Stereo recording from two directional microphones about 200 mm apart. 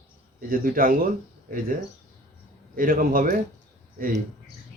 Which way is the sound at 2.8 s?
45° right (ahead or behind).